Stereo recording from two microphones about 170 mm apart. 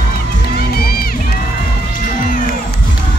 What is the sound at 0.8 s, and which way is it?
Crowd, 60° left (ahead or behind).